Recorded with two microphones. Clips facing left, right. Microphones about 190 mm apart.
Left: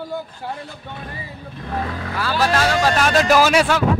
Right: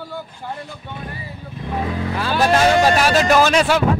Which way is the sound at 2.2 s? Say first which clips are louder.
Right 3 dB; 20° right (ahead or behind).